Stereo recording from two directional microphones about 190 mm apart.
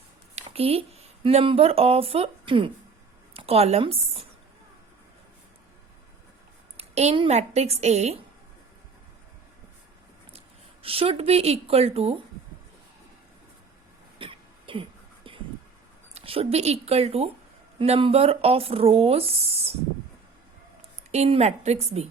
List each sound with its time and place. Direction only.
0.3 s speech: 30° right (ahead or behind)
6.7 s speech: 35° right (ahead or behind)
10.8 s speech: 30° right (ahead or behind)
14.2 s throat clearing: 25° right (ahead or behind)
16.1 s speech: 30° right (ahead or behind)
21.1 s speech: 35° right (ahead or behind)